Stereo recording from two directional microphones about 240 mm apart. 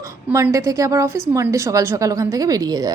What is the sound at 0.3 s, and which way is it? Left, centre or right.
Speech, centre.